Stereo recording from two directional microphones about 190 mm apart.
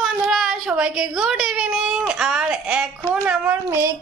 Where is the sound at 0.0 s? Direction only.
Centre (ahead or behind).